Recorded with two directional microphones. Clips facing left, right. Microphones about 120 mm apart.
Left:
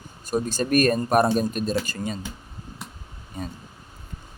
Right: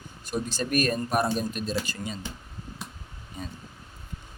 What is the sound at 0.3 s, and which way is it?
Speech, 45° left (ahead or behind).